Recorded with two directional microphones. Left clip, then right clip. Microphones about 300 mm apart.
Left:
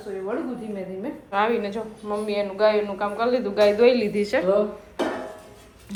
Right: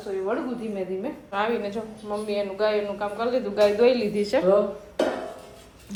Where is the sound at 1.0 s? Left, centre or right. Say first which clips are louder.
Left 6 dB; centre.